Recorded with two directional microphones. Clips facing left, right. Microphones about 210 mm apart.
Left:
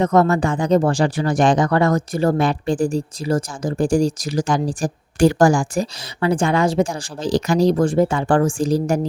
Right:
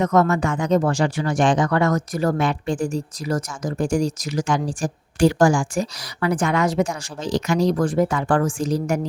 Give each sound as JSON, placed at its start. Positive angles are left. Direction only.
{"t": 0.0, "sound": "speech", "side_deg": 30}